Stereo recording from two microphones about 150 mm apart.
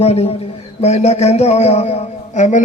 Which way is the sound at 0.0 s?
45° left (ahead or behind).